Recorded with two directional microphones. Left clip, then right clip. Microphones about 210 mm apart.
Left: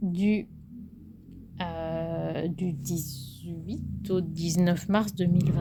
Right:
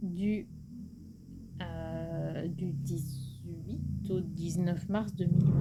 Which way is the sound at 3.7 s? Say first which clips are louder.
Left 6 dB; 45° left (ahead or behind).